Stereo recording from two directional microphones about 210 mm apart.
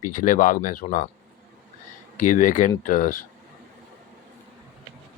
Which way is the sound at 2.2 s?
40° left (ahead or behind).